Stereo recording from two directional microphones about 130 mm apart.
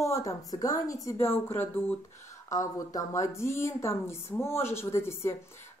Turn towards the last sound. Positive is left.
turn(degrees=20)  # may be behind; listen again after turning